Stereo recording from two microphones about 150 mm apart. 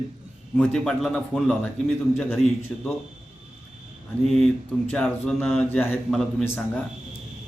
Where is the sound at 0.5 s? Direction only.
5° left (ahead or behind).